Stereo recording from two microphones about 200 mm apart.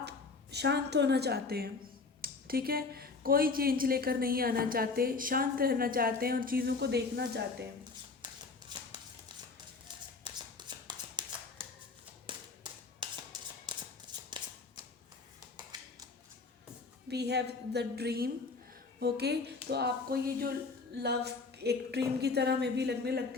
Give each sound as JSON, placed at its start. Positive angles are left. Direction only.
{"t": 0.5, "sound": "a woman's voice", "side_deg": -55}
{"t": 8.7, "sound": "a sound", "side_deg": -20}
{"t": 10.2, "sound": "shuffling cards", "side_deg": -20}
{"t": 12.3, "sound": "tap", "side_deg": -25}
{"t": 13.0, "sound": "a sound", "side_deg": -25}
{"t": 13.7, "sound": "shuffle", "side_deg": -20}
{"t": 17.1, "sound": "a woman's voice", "side_deg": -55}